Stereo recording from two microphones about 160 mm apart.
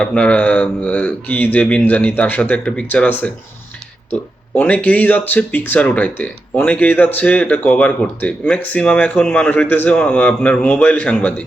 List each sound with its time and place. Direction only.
0.0 s speech: 5° left (ahead or behind)